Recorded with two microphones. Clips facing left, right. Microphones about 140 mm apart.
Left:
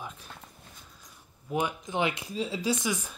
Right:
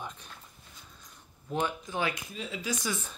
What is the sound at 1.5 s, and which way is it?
Speech, 15° left (ahead or behind).